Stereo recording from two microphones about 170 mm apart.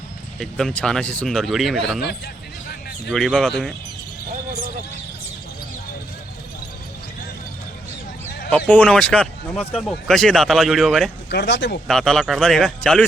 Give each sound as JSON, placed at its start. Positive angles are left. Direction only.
{"t": 0.3, "sound": "speech", "side_deg": 5}
{"t": 2.0, "sound": "a sound", "side_deg": 75}
{"t": 3.1, "sound": "speech", "side_deg": 0}
{"t": 8.4, "sound": "speech", "side_deg": 5}
{"t": 11.3, "sound": "speech", "side_deg": 85}
{"t": 11.9, "sound": "speech", "side_deg": 5}